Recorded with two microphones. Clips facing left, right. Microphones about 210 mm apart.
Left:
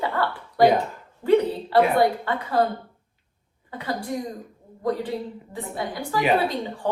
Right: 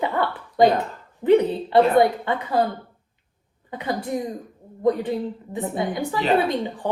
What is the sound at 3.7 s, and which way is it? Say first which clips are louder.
Speech: right 3 dB; 20° right (ahead or behind).